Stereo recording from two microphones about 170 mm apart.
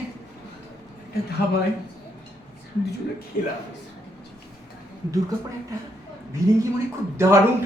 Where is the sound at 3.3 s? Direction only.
55° left (ahead or behind).